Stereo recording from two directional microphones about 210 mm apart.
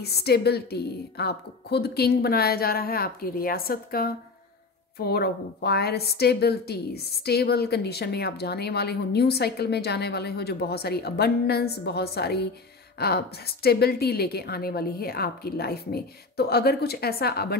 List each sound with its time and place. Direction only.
0.0 s a woman's voice: 50° left (ahead or behind)